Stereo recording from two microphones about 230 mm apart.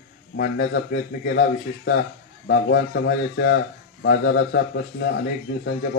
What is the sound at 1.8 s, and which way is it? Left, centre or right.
A man's voice, left.